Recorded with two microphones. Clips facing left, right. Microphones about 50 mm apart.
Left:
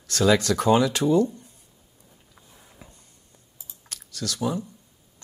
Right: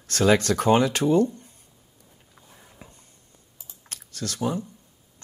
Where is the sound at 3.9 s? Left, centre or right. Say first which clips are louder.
Left 1 dB; right.